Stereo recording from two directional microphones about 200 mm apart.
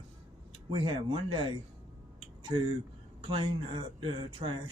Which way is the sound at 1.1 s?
25° right (ahead or behind).